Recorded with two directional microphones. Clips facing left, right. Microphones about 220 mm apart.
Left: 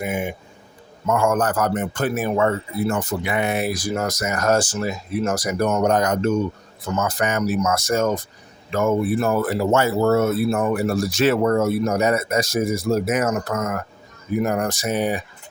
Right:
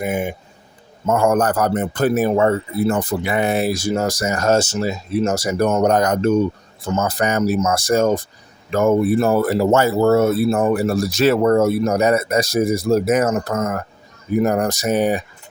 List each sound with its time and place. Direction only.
0.0 s speech: 40° right (ahead or behind)